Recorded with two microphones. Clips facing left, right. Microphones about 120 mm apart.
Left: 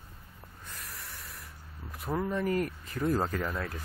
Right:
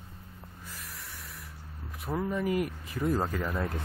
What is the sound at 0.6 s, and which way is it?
Snort, centre (ahead or behind).